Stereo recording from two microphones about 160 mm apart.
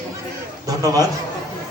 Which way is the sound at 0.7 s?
20° right (ahead or behind).